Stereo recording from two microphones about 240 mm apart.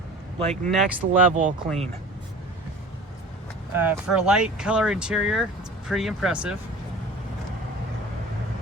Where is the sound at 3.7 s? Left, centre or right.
Centre.